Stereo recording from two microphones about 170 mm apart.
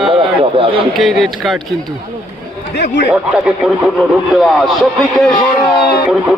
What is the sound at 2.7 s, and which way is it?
Speech, 75° left (ahead or behind).